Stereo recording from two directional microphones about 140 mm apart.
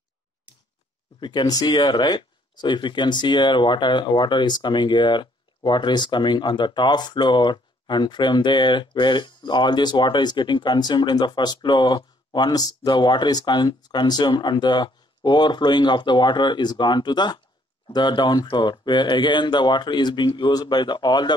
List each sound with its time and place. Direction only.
1.2 s speech: 30° left (ahead or behind)